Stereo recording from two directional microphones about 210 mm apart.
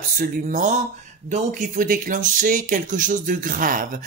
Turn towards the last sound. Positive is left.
turn(degrees=-40)  # may be behind; listen again after turning